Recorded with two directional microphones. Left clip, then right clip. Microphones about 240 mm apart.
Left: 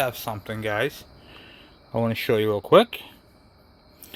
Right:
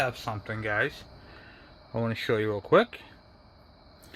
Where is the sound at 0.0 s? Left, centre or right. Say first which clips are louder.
Left 3 dB; left.